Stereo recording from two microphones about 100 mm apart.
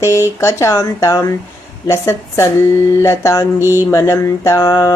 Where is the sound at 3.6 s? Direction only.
25° right (ahead or behind).